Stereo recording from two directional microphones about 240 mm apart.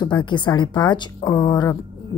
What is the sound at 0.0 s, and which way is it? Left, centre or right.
A woman's voice, centre.